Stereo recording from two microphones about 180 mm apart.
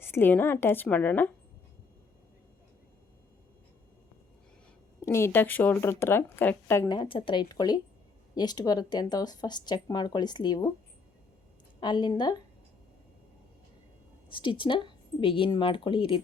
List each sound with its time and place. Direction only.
0.0 s speech: 10° left (ahead or behind)
5.0 s speech: 15° left (ahead or behind)
11.8 s speech: 25° left (ahead or behind)
14.3 s speech: 25° left (ahead or behind)